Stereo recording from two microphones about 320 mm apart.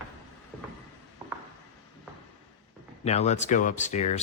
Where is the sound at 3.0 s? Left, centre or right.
Left.